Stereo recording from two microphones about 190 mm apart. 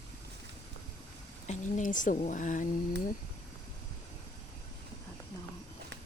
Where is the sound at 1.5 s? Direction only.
40° left (ahead or behind).